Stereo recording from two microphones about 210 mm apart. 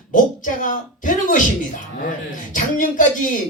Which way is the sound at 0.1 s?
40° left (ahead or behind).